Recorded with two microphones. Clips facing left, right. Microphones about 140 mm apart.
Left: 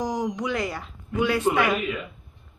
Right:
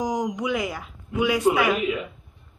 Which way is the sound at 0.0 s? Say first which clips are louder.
Right 1 dB; 20° right (ahead or behind).